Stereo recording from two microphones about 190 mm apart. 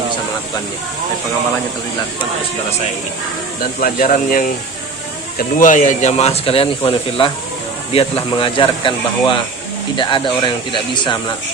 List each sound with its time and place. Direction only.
3.6 s speech: 50° left (ahead or behind); by 11.2 s 25° left (ahead or behind)